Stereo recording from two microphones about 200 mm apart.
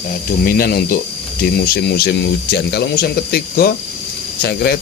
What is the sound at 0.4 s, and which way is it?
Speech, 50° left (ahead or behind).